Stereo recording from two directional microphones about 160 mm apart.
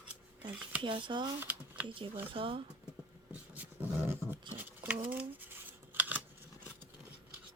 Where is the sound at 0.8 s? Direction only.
30° right (ahead or behind).